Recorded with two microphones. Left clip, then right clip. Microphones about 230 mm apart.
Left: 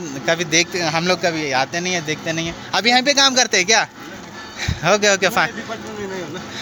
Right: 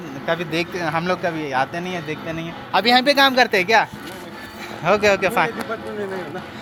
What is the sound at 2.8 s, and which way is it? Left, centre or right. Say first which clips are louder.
Speech: even; centre.